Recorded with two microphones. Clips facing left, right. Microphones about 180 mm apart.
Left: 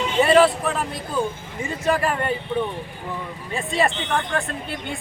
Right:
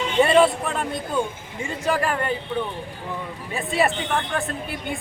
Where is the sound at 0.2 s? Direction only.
5° left (ahead or behind).